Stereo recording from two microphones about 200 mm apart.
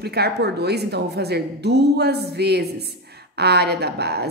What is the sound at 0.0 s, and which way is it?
A woman's voice, 55° right (ahead or behind).